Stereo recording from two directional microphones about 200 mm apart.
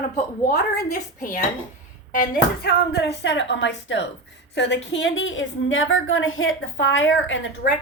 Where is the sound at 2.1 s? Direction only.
45° left (ahead or behind); by 7.7 s 70° left (ahead or behind).